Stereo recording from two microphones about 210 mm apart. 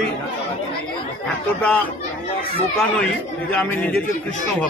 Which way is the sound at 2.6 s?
5° left (ahead or behind).